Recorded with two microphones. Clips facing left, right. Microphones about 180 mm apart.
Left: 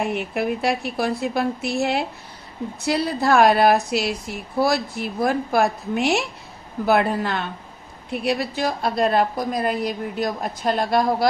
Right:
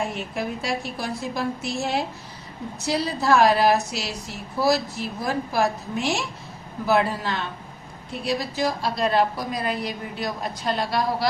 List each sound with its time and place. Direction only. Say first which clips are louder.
0.0 s a woman's voice: left 4 dB; 60° left (ahead or behind)